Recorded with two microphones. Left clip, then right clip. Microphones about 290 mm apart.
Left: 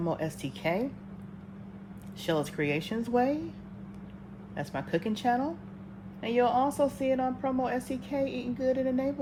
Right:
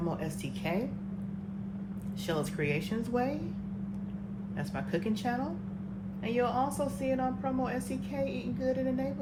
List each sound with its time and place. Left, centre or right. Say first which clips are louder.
0.0 s a woman's voice: left 4 dB; left
2.2 s a woman's voice: left 4 dB; left
4.5 s a woman's voice: left 4 dB; left